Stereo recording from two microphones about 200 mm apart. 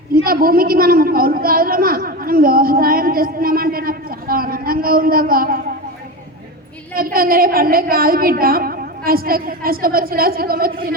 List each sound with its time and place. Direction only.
0.1 s a woman's voice: 45° right (ahead or behind)
6.9 s a woman's voice: 45° right (ahead or behind)